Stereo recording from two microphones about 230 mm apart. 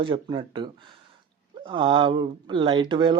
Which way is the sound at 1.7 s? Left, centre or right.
Right.